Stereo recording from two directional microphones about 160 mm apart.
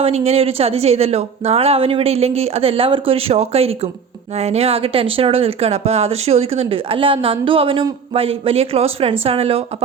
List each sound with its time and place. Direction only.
0.0 s speech: 40° right (ahead or behind)